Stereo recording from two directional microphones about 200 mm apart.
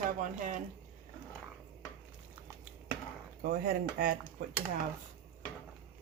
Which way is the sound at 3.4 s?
50° right (ahead or behind).